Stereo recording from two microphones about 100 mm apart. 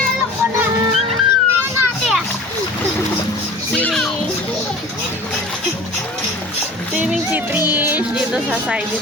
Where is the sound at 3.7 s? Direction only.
15° left (ahead or behind).